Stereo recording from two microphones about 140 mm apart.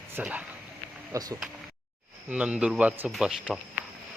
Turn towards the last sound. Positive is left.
turn(degrees=-5)  # may be behind; listen again after turning